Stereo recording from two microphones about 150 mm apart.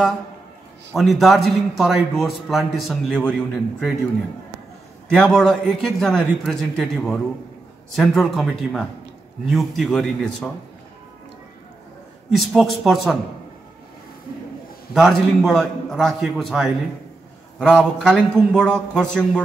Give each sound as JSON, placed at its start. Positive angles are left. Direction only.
{"t": 0.9, "sound": "a man's voice", "side_deg": 0}
{"t": 5.1, "sound": "a man's voice", "side_deg": 5}
{"t": 12.3, "sound": "a man's voice", "side_deg": 0}
{"t": 15.0, "sound": "a man's voice", "side_deg": 0}